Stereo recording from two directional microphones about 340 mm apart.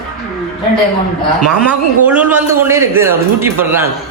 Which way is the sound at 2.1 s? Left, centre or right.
Centre.